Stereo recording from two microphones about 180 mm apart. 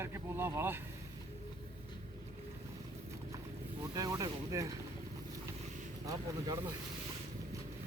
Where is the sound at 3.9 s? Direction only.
20° right (ahead or behind).